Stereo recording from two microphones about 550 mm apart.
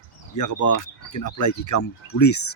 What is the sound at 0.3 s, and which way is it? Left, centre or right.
Speech, left.